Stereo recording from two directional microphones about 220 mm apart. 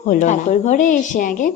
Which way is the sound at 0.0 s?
35° left (ahead or behind).